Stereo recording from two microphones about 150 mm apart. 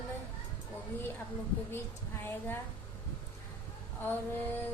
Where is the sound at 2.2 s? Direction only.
15° left (ahead or behind).